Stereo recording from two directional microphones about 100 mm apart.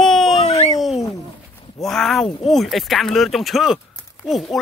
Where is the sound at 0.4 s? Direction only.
65° left (ahead or behind).